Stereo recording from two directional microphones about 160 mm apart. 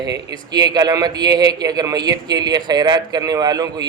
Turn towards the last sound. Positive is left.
turn(degrees=-25)  # may be behind; listen again after turning